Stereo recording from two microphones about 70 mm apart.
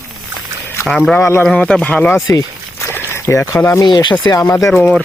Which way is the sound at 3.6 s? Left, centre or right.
Left.